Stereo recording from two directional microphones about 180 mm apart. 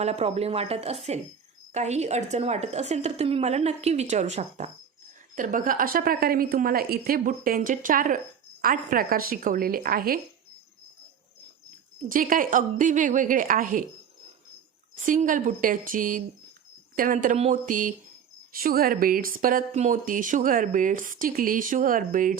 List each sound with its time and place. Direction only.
0.0 s a woman's voice: 35° right (ahead or behind); by 10.2 s 55° right (ahead or behind)
12.0 s speech: 50° right (ahead or behind)
14.9 s speech: 45° right (ahead or behind)